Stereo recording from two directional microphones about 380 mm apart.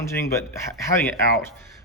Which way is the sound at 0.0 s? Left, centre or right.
Centre.